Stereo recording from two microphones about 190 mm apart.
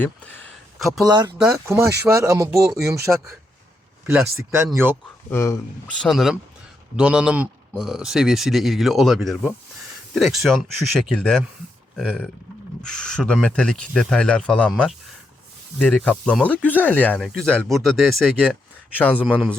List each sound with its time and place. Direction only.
0.0 s speech: 10° left (ahead or behind)
1.0 s speech: 20° right (ahead or behind)
1.4 s speech: 5° right (ahead or behind)
1.6 s speech: 15° right (ahead or behind)
5.3 s speech: 15° left (ahead or behind)
6.0 s speech: centre (ahead or behind)